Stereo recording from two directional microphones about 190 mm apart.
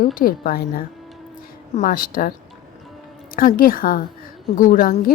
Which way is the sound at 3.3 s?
50° left (ahead or behind).